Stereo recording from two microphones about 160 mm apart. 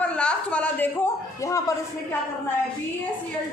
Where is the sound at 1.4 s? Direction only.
20° left (ahead or behind).